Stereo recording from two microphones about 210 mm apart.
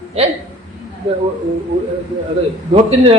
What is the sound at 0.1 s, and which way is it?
Speech, 30° right (ahead or behind).